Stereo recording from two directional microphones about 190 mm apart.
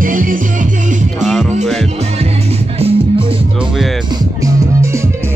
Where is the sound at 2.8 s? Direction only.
30° right (ahead or behind).